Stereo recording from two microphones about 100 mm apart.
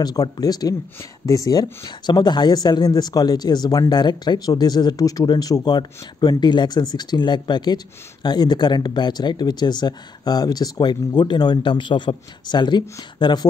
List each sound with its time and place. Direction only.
0.0 s speech: 40° left (ahead or behind)